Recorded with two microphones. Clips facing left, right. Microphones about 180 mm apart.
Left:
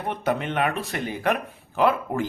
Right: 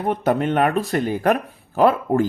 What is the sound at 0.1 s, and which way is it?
Speech, 45° right (ahead or behind).